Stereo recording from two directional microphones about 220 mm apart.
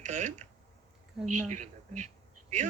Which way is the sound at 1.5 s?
35° right (ahead or behind).